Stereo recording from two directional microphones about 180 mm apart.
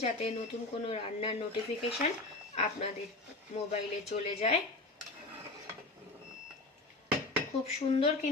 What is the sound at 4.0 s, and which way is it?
Speech, 35° left (ahead or behind).